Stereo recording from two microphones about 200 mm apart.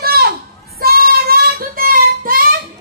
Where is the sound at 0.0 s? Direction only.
50° right (ahead or behind).